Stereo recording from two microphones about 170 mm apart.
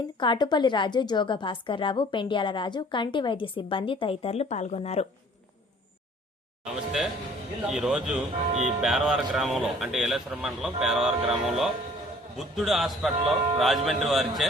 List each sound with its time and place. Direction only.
0.2 s a woman's voice: 25° left (ahead or behind)
6.7 s speech: 5° right (ahead or behind)